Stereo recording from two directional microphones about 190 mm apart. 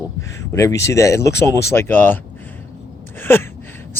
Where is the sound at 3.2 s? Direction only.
10° left (ahead or behind).